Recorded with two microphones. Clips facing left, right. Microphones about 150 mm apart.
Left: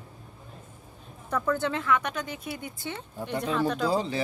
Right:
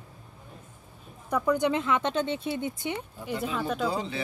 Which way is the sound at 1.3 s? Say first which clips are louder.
Right 3 dB; 15° right (ahead or behind).